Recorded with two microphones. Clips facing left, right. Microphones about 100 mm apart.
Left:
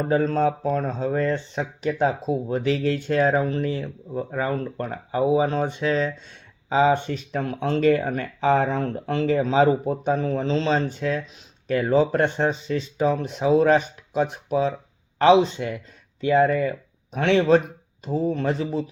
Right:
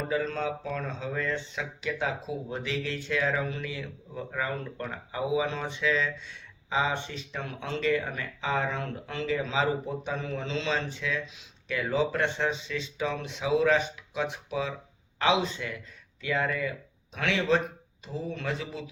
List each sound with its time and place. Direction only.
0.0 s speech: 45° left (ahead or behind)
7.1 s speech: 50° left (ahead or behind)